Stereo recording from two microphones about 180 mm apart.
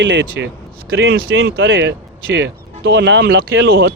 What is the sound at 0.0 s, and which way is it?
Speech, 85° right.